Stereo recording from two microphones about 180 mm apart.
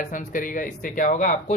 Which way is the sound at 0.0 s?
45° left (ahead or behind).